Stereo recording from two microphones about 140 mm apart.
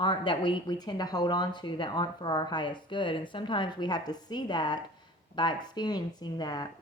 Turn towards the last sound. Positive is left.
turn(degrees=30)  # may be behind; listen again after turning